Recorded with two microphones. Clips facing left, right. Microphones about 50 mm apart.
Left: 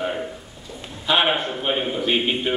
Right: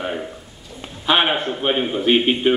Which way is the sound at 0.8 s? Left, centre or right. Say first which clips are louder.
Right 2 dB; centre.